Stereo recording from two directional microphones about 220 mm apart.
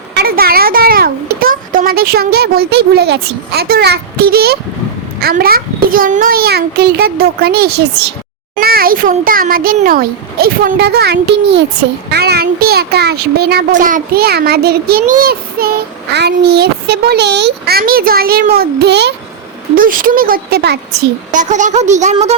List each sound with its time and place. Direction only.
0.2 s a child's voice: 45° right (ahead or behind)
21.3 s a child's voice: 35° right (ahead or behind)